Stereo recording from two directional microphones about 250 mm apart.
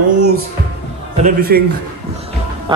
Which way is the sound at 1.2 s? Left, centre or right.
Right.